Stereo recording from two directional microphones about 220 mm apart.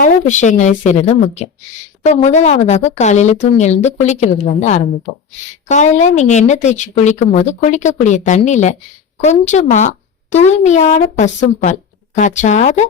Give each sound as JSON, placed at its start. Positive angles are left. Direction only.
{"t": 0.0, "sound": "speech", "side_deg": 35}